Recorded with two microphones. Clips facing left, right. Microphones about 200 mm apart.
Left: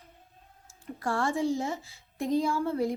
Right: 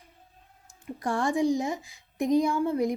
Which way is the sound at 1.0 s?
15° right (ahead or behind).